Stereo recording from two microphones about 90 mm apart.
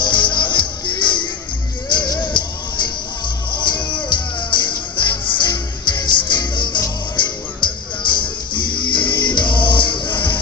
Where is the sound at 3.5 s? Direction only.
60° left (ahead or behind).